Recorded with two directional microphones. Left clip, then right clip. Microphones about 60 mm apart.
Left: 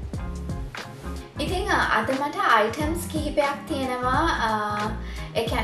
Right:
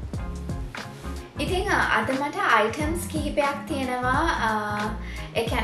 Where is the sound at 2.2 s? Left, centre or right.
Centre.